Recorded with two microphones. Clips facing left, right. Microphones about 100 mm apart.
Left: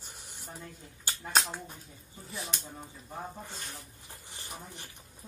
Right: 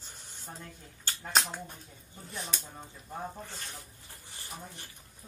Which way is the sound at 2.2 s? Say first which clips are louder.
Even; centre (ahead or behind).